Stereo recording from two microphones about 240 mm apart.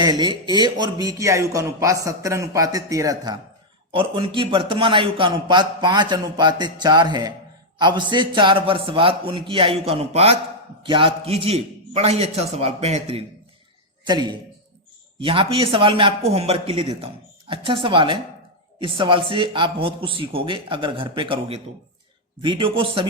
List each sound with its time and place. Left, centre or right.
0.0 s a man's voice: centre